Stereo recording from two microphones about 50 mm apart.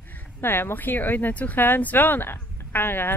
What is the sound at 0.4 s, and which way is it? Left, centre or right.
Speech, left.